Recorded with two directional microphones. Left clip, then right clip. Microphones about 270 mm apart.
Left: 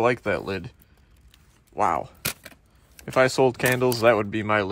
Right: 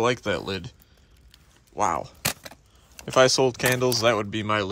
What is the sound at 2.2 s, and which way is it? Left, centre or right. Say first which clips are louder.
Keys jangling: right 3 dB; centre.